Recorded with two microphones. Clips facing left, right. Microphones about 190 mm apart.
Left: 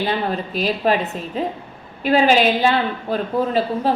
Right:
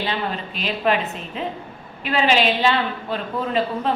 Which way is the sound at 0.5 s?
40° left (ahead or behind).